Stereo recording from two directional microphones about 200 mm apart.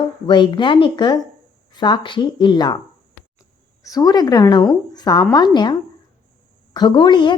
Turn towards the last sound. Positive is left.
turn(degrees=20)  # may be behind; listen again after turning